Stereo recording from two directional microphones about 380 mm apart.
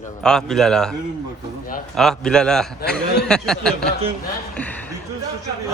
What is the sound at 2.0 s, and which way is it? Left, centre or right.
Speech, centre.